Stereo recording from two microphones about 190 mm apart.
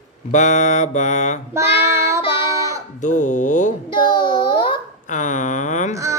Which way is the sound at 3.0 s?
40° left (ahead or behind).